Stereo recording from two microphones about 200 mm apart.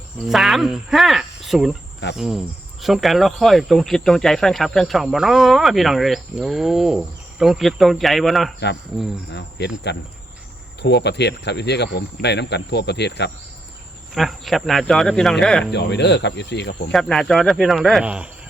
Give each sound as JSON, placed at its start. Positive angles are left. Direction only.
{"t": 0.3, "sound": "speech", "side_deg": 0}
{"t": 9.3, "sound": "cricket", "side_deg": 55}
{"t": 14.1, "sound": "speech", "side_deg": 0}
{"t": 15.7, "sound": "cricket", "side_deg": 60}
{"t": 16.9, "sound": "speech", "side_deg": 0}